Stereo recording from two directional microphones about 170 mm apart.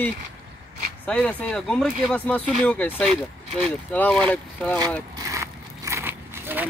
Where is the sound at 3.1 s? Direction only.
35° right (ahead or behind).